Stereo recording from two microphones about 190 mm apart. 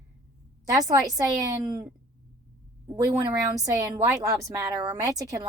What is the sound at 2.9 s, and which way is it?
A woman's voice, 20° right (ahead or behind).